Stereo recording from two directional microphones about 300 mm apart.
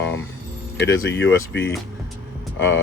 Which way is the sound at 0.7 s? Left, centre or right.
Left.